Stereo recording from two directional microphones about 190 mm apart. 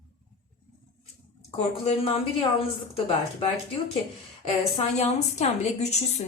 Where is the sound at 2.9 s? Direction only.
30° left (ahead or behind).